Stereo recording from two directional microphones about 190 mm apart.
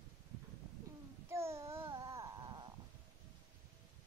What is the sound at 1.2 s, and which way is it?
Babbling, 15° right (ahead or behind).